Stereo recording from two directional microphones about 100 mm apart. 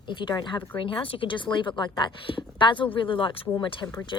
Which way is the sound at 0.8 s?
65° left (ahead or behind).